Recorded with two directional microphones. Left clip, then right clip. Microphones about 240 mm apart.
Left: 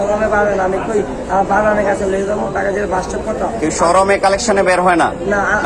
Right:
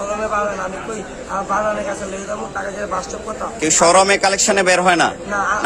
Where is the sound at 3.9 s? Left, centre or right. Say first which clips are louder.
Left 2 dB; right.